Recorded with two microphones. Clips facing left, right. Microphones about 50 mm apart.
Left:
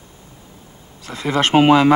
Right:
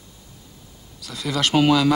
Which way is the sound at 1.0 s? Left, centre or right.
Left.